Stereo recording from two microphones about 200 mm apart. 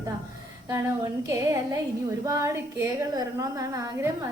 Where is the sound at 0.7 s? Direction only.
15° right (ahead or behind).